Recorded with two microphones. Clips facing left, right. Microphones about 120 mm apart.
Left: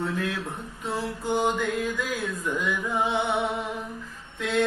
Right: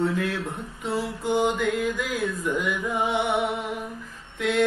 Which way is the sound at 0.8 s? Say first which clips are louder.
Right 2 dB; 15° right (ahead or behind).